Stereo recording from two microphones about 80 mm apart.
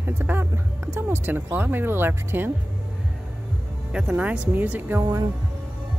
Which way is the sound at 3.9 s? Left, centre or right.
Centre.